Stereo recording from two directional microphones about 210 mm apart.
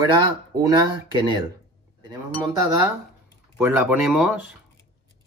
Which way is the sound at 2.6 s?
15° right (ahead or behind).